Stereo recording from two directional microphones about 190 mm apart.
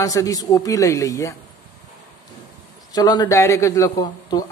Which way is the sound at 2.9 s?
20° left (ahead or behind).